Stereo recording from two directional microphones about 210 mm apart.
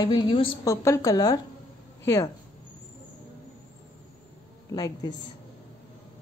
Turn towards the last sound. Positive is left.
turn(degrees=15)  # may be behind; listen again after turning